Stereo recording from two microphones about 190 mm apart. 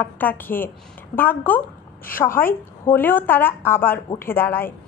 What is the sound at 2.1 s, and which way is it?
Speech, 45° left (ahead or behind).